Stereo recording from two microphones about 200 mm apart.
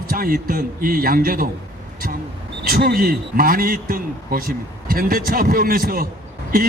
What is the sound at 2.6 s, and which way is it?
A man's voice, 50° right (ahead or behind).